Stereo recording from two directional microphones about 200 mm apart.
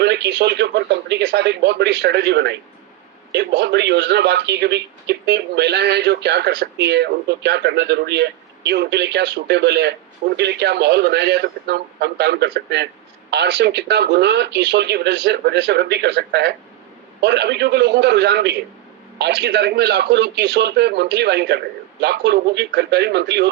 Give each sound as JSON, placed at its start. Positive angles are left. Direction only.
{"t": 0.0, "sound": "speech", "side_deg": -60}